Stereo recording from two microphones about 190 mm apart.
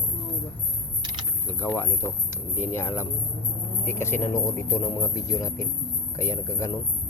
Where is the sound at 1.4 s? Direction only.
10° left (ahead or behind).